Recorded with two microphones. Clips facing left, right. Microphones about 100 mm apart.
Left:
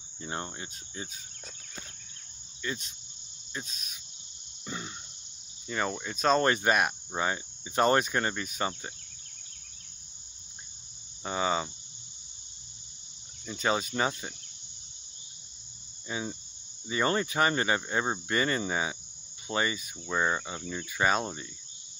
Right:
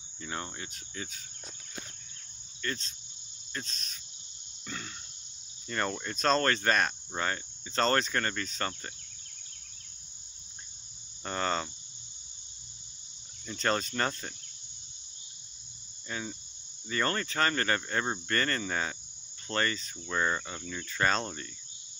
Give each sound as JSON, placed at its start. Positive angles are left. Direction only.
{"t": 0.2, "sound": "cricket", "side_deg": 30}
{"t": 2.6, "sound": "speech", "side_deg": 10}
{"t": 3.5, "sound": "cricket", "side_deg": 10}
{"t": 5.7, "sound": "speech", "side_deg": 5}
{"t": 6.4, "sound": "cricket", "side_deg": 15}
{"t": 11.2, "sound": "cricket", "side_deg": 5}
{"t": 13.5, "sound": "cricket", "side_deg": 5}
{"t": 16.1, "sound": "cricket", "side_deg": 10}